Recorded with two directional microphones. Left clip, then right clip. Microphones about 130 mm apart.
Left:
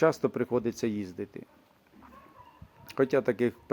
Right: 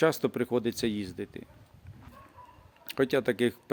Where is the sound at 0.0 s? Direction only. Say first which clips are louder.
Left 1 dB; 15° right (ahead or behind).